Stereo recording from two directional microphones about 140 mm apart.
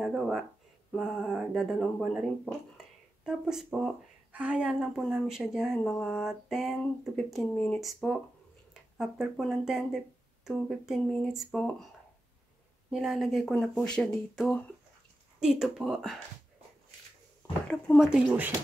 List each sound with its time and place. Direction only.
0.0 s speech: centre (ahead or behind)
12.9 s speech: centre (ahead or behind)
17.9 s speech: 5° right (ahead or behind)